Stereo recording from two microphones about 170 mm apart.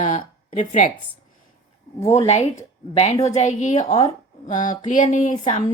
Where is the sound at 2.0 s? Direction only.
40° left (ahead or behind).